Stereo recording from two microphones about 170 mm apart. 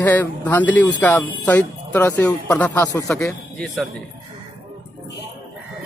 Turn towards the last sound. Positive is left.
turn(degrees=0)  # may be behind; listen again after turning